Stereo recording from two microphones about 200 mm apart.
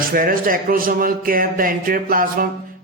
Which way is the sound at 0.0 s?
45° right (ahead or behind).